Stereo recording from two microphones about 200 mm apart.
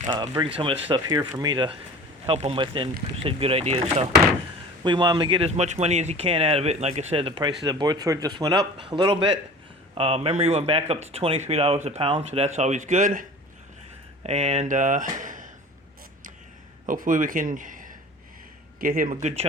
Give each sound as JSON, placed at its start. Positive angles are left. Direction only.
{"t": 0.1, "sound": "speech", "side_deg": -20}
{"t": 14.3, "sound": "speech", "side_deg": -35}
{"t": 16.8, "sound": "a man's voice", "side_deg": -40}